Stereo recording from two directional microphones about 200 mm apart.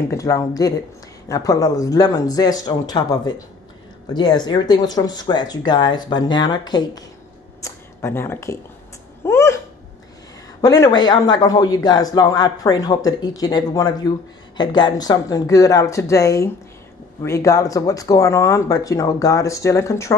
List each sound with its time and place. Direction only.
0.1 s a man's voice: 15° left (ahead or behind)
9.2 s a sound: 15° left (ahead or behind)
10.6 s a man's voice: 20° left (ahead or behind)